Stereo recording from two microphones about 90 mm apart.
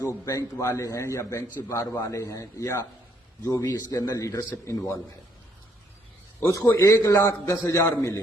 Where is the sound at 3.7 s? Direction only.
45° left (ahead or behind).